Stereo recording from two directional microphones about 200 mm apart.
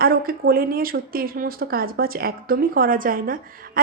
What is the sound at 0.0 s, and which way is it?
A woman's voice, 45° right (ahead or behind).